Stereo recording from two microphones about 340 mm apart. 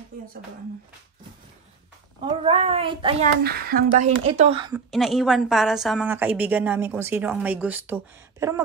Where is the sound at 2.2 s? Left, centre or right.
Centre.